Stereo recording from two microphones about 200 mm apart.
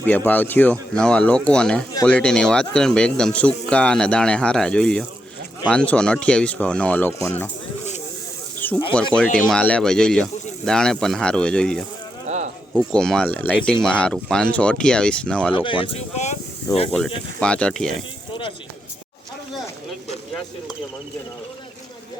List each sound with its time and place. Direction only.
0.0 s speech: 10° left (ahead or behind)
8.5 s snake: 10° left (ahead or behind)
9.5 s speech: 5° left (ahead or behind)
15.5 s speech: 25° left (ahead or behind)
16.7 s speech: 15° left (ahead or behind)
17.4 s speech: 5° left (ahead or behind)